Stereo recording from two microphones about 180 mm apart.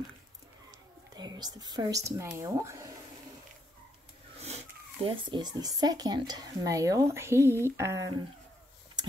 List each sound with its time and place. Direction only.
1.1 s speech: 20° right (ahead or behind)
4.4 s speech: 35° right (ahead or behind); by 8.1 s 15° right (ahead or behind)